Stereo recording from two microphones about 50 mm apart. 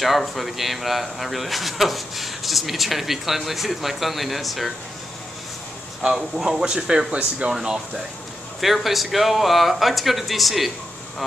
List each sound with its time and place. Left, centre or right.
0.0 s speech: centre
6.0 s speech: centre
7.1 s speech: right
7.4 s speech: centre